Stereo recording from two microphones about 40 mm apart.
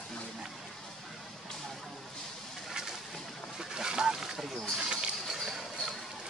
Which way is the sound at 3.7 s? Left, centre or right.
Centre.